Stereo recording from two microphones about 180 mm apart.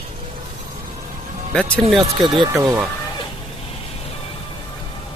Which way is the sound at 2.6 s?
15° right (ahead or behind).